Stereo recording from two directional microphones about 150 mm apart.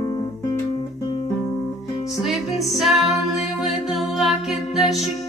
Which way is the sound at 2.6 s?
Centre (ahead or behind).